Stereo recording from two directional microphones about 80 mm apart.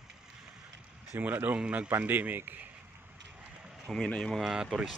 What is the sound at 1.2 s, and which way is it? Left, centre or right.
Speech, right.